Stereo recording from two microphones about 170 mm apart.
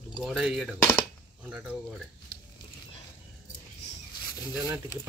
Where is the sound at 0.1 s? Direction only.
Centre (ahead or behind).